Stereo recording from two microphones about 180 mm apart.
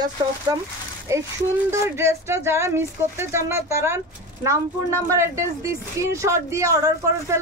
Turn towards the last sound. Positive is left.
turn(degrees=-15)  # may be behind; listen again after turning